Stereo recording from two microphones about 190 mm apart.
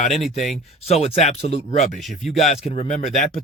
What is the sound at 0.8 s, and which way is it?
Speech, 35° left (ahead or behind).